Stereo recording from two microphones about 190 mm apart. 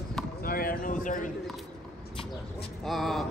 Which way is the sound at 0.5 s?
50° left (ahead or behind).